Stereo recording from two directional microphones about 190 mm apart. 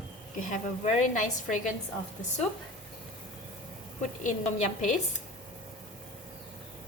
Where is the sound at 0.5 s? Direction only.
40° left (ahead or behind).